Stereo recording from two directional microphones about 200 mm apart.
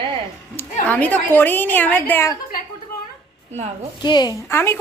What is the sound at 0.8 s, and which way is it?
A woman's voice, 10° left (ahead or behind).